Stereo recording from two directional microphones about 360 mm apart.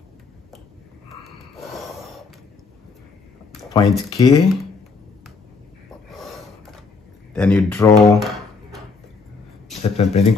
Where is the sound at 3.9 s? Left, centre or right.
Centre.